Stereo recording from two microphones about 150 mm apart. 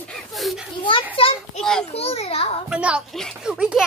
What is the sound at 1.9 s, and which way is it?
Speech, 45° left (ahead or behind).